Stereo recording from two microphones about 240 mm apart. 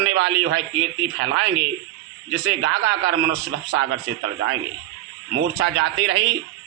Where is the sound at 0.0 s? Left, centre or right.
Right.